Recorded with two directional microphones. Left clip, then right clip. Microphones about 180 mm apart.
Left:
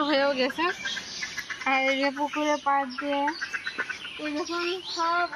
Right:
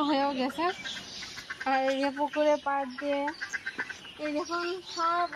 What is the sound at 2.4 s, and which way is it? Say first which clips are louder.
Chicken: left 3 dB; 25° right (ahead or behind).